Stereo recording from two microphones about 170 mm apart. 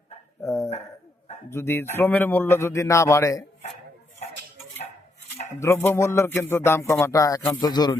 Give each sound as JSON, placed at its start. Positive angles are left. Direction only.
{"t": 0.4, "sound": "speech", "side_deg": 15}
{"t": 5.5, "sound": "a man's voice", "side_deg": 15}